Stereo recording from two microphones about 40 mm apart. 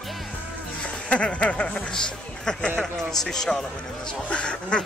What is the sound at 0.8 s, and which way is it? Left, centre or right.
Speech, left.